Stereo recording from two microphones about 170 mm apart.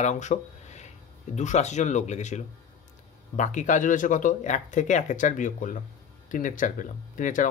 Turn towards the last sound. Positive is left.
turn(degrees=50)  # may be behind; listen again after turning